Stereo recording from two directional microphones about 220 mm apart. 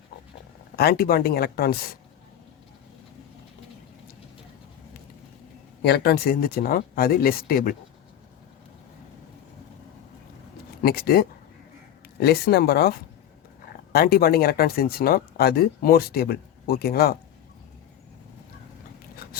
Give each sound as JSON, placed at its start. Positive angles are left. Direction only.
{"t": 0.8, "sound": "speech", "side_deg": 45}
{"t": 5.8, "sound": "speech", "side_deg": 50}
{"t": 10.8, "sound": "speech", "side_deg": 45}